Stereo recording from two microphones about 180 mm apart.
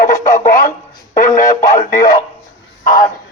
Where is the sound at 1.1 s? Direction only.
50° left (ahead or behind).